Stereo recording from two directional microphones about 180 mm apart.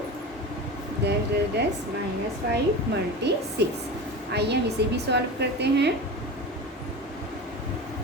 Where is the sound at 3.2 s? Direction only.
70° right (ahead or behind).